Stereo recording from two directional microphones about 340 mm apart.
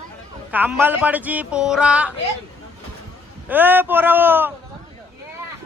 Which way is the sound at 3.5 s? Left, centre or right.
Centre.